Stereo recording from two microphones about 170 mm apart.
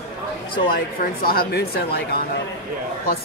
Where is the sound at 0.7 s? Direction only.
60° left (ahead or behind).